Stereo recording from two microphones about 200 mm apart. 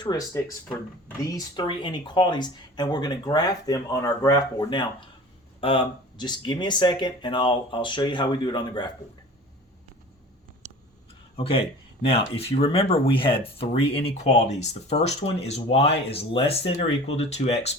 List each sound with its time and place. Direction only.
0.0 s speech: 20° left (ahead or behind)
11.3 s speech: 25° left (ahead or behind)